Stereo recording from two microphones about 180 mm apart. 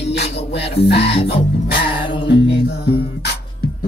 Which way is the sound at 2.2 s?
70° left (ahead or behind).